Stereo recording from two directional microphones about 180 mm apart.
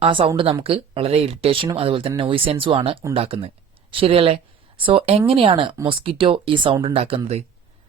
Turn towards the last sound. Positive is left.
turn(degrees=-35)  # may be behind; listen again after turning